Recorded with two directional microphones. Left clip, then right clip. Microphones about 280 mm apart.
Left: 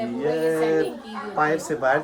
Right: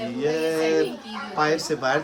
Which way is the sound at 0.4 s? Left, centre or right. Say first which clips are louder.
Left 1 dB; centre.